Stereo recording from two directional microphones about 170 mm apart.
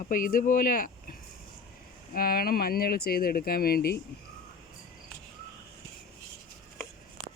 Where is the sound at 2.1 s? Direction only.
60° left (ahead or behind).